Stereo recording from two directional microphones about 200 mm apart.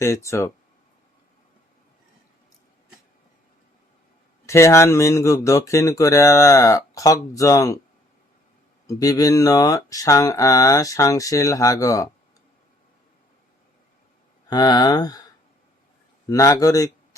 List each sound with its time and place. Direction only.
0.0 s speech: 15° left (ahead or behind)
4.4 s speech: 15° left (ahead or behind)
8.9 s speech: 15° left (ahead or behind)
14.5 s speech: 20° left (ahead or behind)
16.3 s speech: 15° left (ahead or behind)